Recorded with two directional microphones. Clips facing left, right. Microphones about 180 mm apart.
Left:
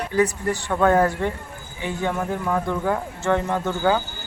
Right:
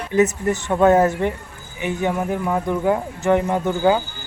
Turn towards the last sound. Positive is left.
turn(degrees=-15)  # may be behind; listen again after turning